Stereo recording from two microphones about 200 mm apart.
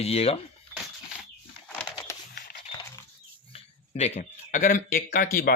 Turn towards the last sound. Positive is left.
turn(degrees=45)  # may be behind; listen again after turning